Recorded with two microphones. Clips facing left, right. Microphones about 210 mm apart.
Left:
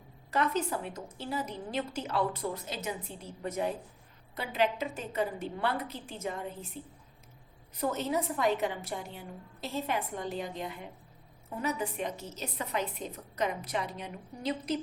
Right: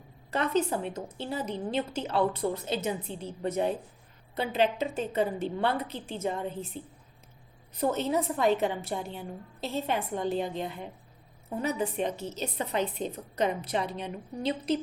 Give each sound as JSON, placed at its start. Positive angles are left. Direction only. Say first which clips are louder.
{"t": 0.3, "sound": "a woman's voice", "louder": "right 3 dB", "side_deg": -25}